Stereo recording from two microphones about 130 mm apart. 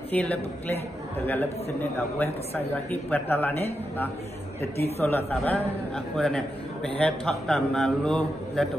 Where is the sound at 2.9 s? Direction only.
15° left (ahead or behind).